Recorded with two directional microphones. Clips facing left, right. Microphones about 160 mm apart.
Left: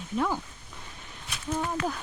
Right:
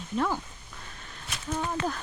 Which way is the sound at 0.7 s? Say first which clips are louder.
Even; 20° left (ahead or behind).